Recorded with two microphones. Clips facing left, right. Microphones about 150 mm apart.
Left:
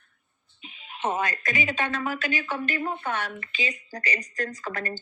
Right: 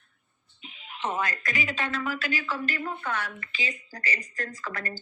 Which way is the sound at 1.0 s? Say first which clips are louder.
Left 3 dB; 20° left (ahead or behind).